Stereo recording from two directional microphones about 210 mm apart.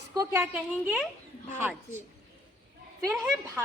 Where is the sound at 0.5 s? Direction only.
5° right (ahead or behind).